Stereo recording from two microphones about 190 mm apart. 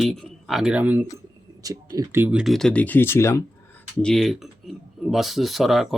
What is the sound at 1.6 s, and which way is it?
Speech, 20° right (ahead or behind).